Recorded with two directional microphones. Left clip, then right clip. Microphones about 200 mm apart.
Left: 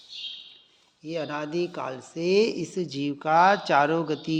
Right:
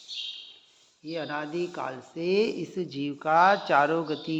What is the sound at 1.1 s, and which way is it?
Speech, 50° left (ahead or behind).